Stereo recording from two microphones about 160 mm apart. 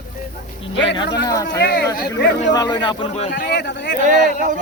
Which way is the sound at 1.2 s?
25° left (ahead or behind).